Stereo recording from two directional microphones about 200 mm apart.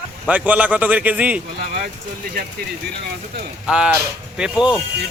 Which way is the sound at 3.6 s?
5° right (ahead or behind).